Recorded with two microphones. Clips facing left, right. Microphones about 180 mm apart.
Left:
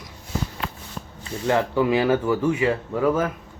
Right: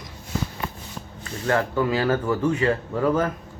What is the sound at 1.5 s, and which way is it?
Speech, 15° left (ahead or behind).